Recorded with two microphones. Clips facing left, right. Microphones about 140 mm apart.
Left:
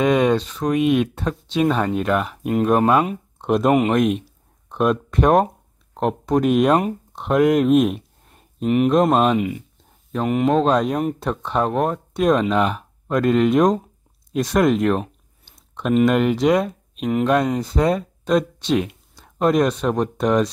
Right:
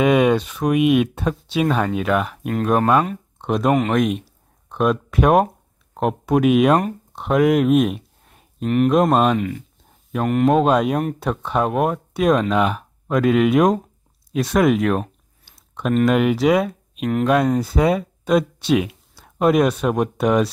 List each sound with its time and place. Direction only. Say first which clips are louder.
0.0 s speech: right 1 dB; 10° right (ahead or behind)
10.5 s speech: right 1 dB; 10° right (ahead or behind)